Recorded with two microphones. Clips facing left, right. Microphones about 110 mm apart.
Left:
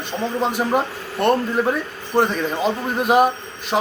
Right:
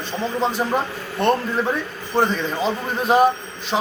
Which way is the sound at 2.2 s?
5° left (ahead or behind).